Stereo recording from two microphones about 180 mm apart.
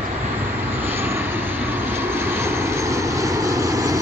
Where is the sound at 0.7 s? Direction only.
10° right (ahead or behind).